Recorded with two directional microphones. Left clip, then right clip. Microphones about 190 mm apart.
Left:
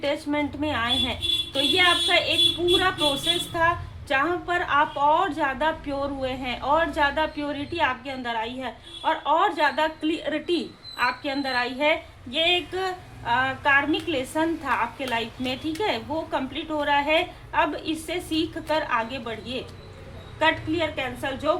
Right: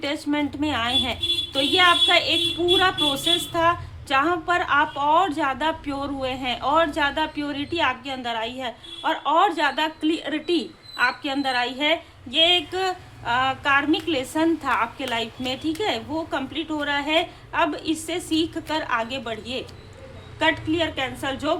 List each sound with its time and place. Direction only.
0.0 s a woman's voice: 20° right (ahead or behind)